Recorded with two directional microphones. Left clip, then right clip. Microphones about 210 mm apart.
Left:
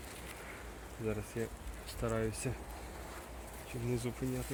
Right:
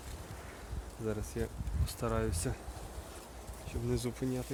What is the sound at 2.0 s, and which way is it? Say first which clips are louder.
Speech: right 1 dB; 10° right (ahead or behind).